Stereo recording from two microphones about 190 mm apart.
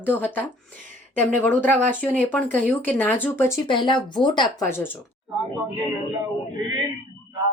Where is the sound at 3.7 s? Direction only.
25° left (ahead or behind).